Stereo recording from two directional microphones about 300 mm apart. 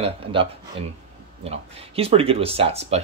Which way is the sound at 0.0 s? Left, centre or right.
Centre.